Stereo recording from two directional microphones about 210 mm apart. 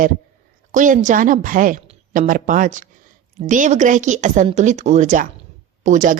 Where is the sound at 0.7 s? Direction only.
40° right (ahead or behind).